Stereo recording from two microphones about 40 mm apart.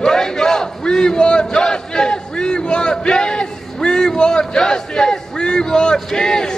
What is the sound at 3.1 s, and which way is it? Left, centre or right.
A man's voice, centre.